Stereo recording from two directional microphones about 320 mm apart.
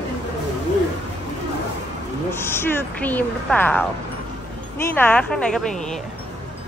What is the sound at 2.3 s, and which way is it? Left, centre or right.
Speech, centre.